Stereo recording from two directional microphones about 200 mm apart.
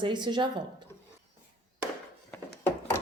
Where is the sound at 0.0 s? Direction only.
20° right (ahead or behind).